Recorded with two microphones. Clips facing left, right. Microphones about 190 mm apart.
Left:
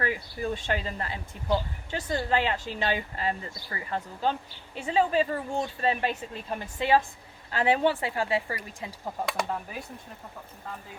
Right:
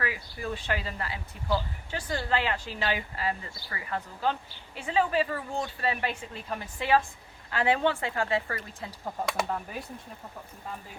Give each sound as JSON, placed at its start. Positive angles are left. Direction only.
{"t": 0.0, "sound": "speech", "side_deg": 30}
{"t": 9.2, "sound": "speech", "side_deg": 0}